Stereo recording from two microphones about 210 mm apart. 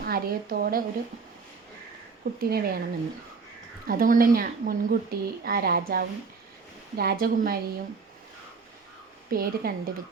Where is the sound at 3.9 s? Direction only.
45° right (ahead or behind).